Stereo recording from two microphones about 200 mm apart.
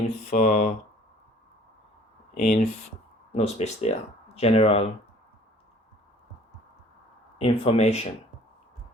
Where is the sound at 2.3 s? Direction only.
40° left (ahead or behind).